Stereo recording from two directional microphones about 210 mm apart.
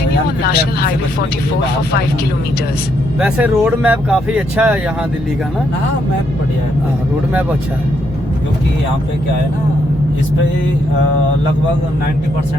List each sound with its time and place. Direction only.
0.4 s speech: 50° left (ahead or behind)
3.2 s speech: 5° right (ahead or behind)